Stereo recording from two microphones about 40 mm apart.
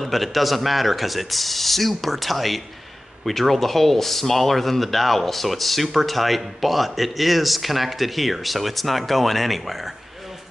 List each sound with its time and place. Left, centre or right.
0.0 s speech: centre